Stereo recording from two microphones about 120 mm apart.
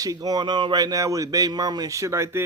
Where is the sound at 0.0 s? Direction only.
30° right (ahead or behind).